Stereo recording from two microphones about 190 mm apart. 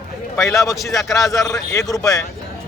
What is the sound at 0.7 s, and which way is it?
Speech, centre (ahead or behind).